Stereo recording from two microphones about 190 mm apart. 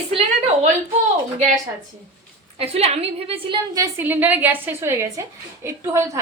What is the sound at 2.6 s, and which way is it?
Speech, 35° right (ahead or behind).